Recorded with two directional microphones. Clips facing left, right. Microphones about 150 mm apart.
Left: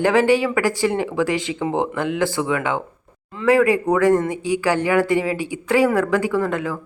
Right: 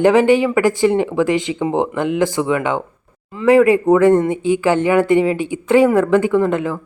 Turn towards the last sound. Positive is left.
turn(degrees=-20)  # may be behind; listen again after turning